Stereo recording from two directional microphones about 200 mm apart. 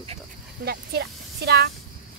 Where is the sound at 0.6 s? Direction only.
55° right (ahead or behind).